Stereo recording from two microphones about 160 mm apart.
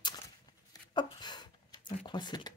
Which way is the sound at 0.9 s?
30° left (ahead or behind).